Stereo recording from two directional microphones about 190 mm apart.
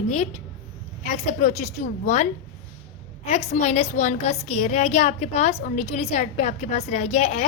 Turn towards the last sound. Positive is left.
turn(degrees=35)  # may be behind; listen again after turning